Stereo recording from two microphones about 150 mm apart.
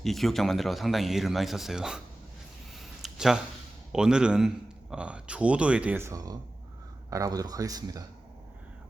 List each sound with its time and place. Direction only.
0.0 s speech: centre (ahead or behind)
2.7 s a sound: centre (ahead or behind)
3.9 s a man's voice: 5° right (ahead or behind); by 8.0 s 25° right (ahead or behind)